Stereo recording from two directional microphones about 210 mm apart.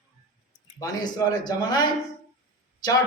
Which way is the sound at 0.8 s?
20° left (ahead or behind).